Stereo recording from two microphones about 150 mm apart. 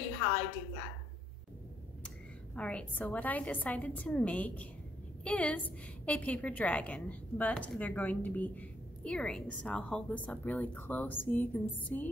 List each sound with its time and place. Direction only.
2.0 s a woman's voice: 10° left (ahead or behind)